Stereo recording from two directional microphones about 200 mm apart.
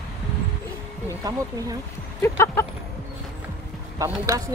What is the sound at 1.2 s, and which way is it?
Speech, 20° right (ahead or behind).